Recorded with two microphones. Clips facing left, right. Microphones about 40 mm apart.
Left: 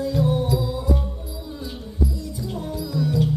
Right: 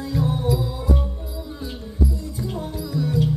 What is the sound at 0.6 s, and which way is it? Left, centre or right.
Music, right.